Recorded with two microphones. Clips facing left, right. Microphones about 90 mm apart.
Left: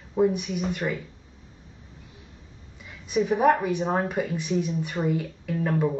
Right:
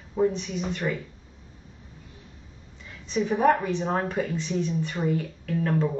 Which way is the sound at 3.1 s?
10° left (ahead or behind).